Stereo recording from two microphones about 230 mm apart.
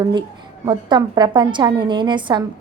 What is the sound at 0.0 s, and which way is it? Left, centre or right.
A woman's voice, centre.